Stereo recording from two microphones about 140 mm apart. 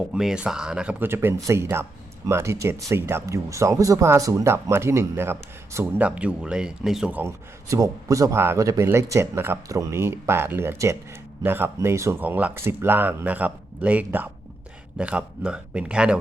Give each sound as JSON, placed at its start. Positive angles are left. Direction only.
{"t": 0.1, "sound": "speech", "side_deg": -5}